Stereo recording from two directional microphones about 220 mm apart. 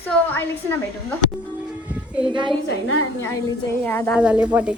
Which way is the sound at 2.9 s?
85° left.